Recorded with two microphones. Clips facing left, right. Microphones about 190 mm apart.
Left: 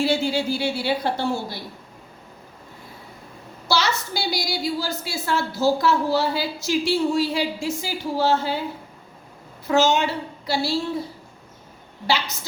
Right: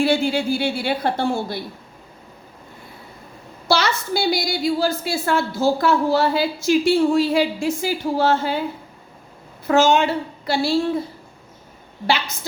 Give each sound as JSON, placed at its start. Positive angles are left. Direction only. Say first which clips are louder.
{"t": 0.0, "sound": "a woman's voice", "louder": "right 3 dB", "side_deg": -55}
{"t": 3.7, "sound": "a woman's voice", "louder": "right 4 dB", "side_deg": -55}
{"t": 9.6, "sound": "a woman's voice", "louder": "right 3 dB", "side_deg": -55}
{"t": 12.0, "sound": "a woman's voice", "louder": "right 2 dB", "side_deg": -55}